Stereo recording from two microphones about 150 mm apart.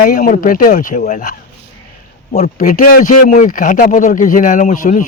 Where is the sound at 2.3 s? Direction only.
55° left (ahead or behind).